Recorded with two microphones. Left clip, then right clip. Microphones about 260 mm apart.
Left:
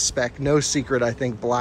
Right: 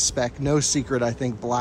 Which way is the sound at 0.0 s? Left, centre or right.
Centre.